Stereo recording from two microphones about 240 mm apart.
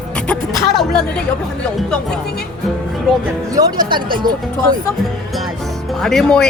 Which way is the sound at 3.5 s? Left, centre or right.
Centre.